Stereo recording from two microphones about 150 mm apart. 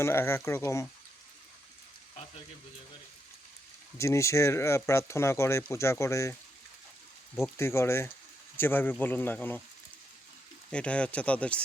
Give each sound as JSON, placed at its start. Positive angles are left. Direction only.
{"t": 0.0, "sound": "speech", "side_deg": 15}
{"t": 3.9, "sound": "speech", "side_deg": 20}
{"t": 7.5, "sound": "speech", "side_deg": 15}
{"t": 10.7, "sound": "speech", "side_deg": 5}